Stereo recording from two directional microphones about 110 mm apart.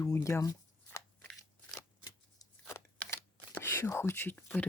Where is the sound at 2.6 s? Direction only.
25° left (ahead or behind).